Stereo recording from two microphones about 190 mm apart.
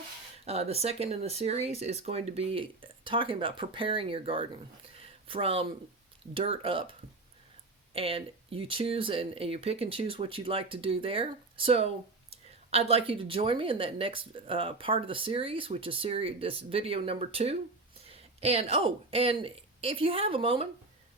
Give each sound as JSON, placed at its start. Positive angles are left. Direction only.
{"t": 0.4, "sound": "speech", "side_deg": -35}
{"t": 4.9, "sound": "a sound", "side_deg": -30}
{"t": 6.3, "sound": "speech", "side_deg": -30}
{"t": 7.9, "sound": "a woman's voice", "side_deg": -30}